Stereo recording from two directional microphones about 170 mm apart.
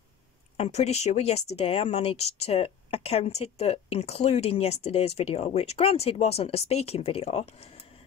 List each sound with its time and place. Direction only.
0.6 s speech: 40° left (ahead or behind)